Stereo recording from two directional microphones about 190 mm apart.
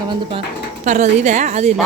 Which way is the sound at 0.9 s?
40° right (ahead or behind).